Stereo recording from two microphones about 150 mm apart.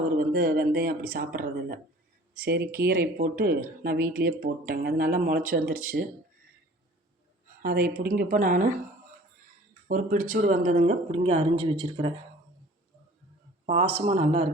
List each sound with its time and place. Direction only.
0.2 s speech: 85° right
7.6 s speech: 75° right (ahead or behind)
9.9 s speech: 60° right (ahead or behind); by 12.1 s 40° right (ahead or behind)
13.7 s speech: 40° right (ahead or behind)